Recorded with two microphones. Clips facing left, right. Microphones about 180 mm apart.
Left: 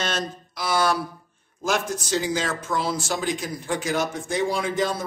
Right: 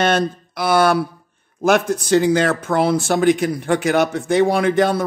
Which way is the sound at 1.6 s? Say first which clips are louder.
Right 9 dB; 60° right (ahead or behind).